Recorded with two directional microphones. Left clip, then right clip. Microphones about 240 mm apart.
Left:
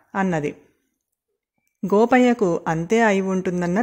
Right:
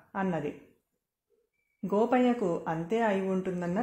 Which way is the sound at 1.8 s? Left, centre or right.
Left.